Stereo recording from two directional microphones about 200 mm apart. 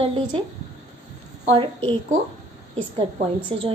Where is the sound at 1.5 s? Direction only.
25° right (ahead or behind).